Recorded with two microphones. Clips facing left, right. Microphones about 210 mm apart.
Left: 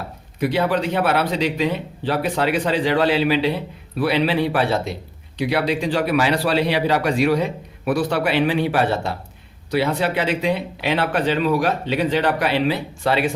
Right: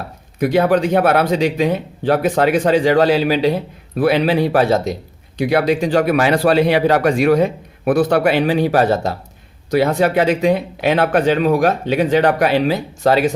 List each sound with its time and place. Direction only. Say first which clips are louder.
0.3 s speech: right 6 dB; 45° right (ahead or behind)